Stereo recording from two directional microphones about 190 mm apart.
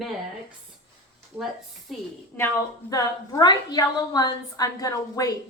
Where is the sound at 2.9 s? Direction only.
20° left (ahead or behind).